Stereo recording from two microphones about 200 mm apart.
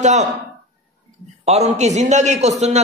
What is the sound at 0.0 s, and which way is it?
Speech, 35° right (ahead or behind).